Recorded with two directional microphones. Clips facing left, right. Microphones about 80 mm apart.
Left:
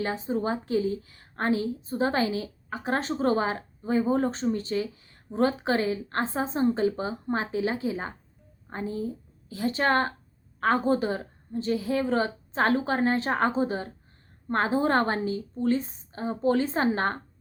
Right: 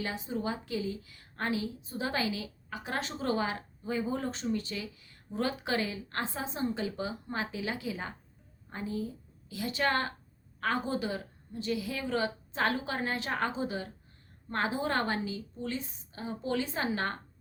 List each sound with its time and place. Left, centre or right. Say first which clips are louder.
0.0 s a woman's voice: left 6 dB; left